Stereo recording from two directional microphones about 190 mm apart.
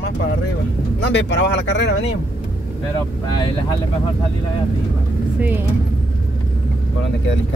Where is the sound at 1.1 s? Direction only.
65° left (ahead or behind).